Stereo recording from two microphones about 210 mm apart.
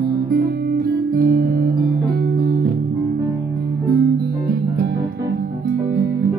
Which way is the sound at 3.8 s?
45° right (ahead or behind).